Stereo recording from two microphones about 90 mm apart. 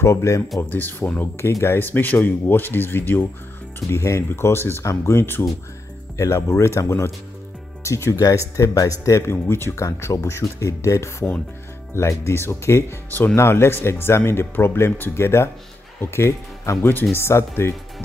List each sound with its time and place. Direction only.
0.0 s speech: 35° left (ahead or behind)
0.6 s speech: 20° left (ahead or behind)